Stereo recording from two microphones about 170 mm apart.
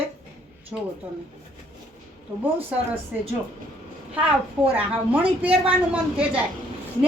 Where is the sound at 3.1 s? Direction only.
10° right (ahead or behind).